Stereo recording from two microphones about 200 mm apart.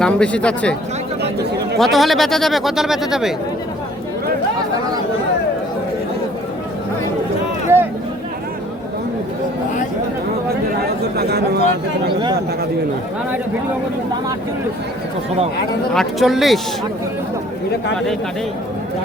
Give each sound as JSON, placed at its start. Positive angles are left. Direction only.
{"t": 0.0, "sound": "speech", "side_deg": 5}
{"t": 1.2, "sound": "speech", "side_deg": -55}
{"t": 1.8, "sound": "speech", "side_deg": 0}
{"t": 7.7, "sound": "a sound", "side_deg": -15}
{"t": 10.8, "sound": "speech", "side_deg": -55}
{"t": 15.9, "sound": "speech", "side_deg": 0}